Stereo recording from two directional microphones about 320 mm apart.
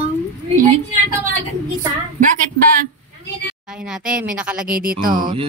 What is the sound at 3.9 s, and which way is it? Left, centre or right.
Speech, centre.